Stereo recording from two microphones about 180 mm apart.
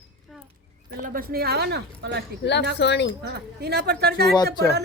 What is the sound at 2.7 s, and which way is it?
Speech, 75° left (ahead or behind).